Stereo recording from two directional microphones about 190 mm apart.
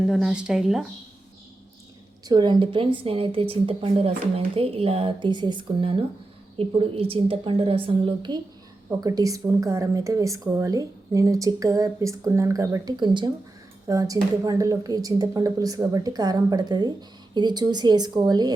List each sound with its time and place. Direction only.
0.0 s speech: 5° right (ahead or behind)
2.2 s a woman's voice: 20° right (ahead or behind)